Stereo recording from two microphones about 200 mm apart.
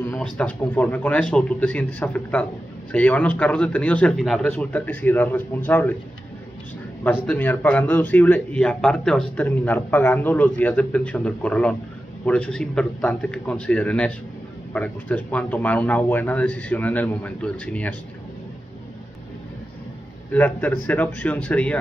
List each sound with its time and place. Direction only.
0.1 s speech: 5° left (ahead or behind)
7.0 s speech: 10° left (ahead or behind)
20.3 s speech: 10° left (ahead or behind)